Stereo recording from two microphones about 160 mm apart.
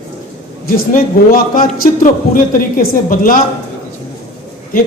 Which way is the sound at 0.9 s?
65° left (ahead or behind).